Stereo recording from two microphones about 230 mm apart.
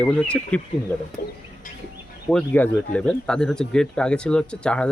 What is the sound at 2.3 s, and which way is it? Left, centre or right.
Speech, centre.